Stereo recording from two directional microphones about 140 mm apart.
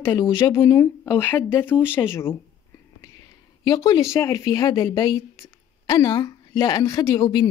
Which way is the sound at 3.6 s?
25° left (ahead or behind).